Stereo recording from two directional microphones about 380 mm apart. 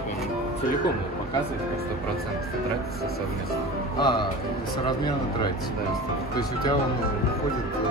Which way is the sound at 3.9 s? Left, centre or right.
Centre.